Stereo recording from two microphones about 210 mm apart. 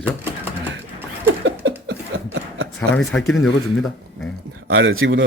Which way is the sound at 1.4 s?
60° right (ahead or behind).